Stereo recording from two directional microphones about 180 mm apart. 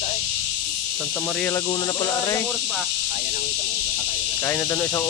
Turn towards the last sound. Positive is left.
turn(degrees=15)  # may be behind; listen again after turning